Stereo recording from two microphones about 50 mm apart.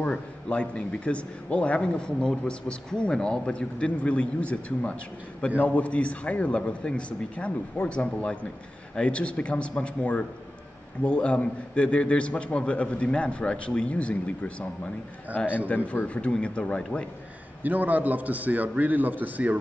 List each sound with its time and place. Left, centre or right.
0.0 s a man's voice: left
15.7 s speech: left
16.1 s a man's voice: left
17.6 s a man's voice: right